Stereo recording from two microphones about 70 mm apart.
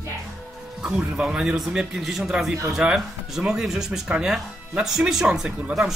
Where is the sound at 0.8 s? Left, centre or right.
Centre.